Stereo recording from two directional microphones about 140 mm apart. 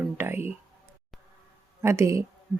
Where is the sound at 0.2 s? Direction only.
15° right (ahead or behind).